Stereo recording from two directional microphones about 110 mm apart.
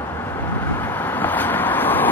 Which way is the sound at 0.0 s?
25° left (ahead or behind).